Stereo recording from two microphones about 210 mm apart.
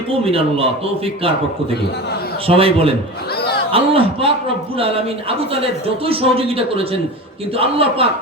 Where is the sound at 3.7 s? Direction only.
25° right (ahead or behind).